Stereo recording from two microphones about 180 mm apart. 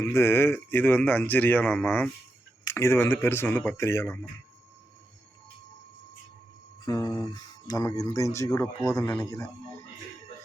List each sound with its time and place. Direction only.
0.0 s speech: 15° left (ahead or behind)
6.8 s speech: 20° left (ahead or behind)